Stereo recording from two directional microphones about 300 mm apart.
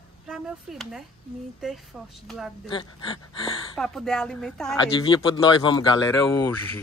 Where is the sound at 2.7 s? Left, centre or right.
Centre.